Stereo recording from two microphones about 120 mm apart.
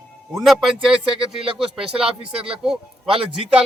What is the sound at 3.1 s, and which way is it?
Speech, 50° right (ahead or behind).